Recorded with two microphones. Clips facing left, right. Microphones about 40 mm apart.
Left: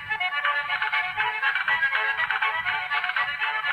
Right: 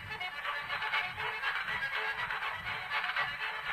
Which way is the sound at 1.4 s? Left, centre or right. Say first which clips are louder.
Left 12 dB; left.